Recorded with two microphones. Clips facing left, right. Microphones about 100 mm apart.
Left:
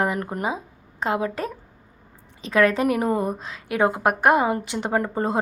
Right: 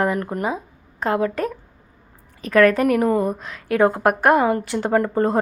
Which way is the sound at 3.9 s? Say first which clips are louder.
Right 3 dB; 5° left (ahead or behind).